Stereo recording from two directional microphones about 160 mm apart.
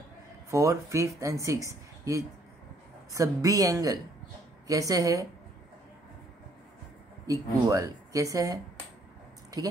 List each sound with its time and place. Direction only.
0.5 s speech: 20° right (ahead or behind)
7.2 s speech: 20° right (ahead or behind)